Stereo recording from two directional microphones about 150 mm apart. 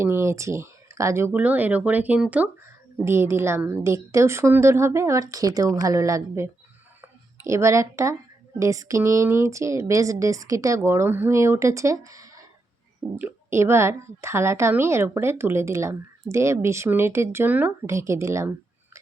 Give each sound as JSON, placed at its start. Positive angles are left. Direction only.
{"t": 0.0, "sound": "a woman's voice", "side_deg": -20}
{"t": 7.0, "sound": "a sound", "side_deg": -20}
{"t": 8.5, "sound": "a woman's voice", "side_deg": -20}